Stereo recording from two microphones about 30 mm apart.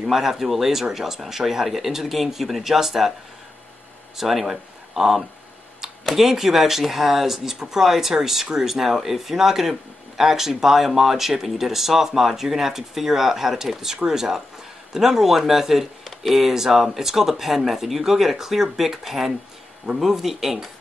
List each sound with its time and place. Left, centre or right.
0.0 s speech: centre
4.2 s speech: centre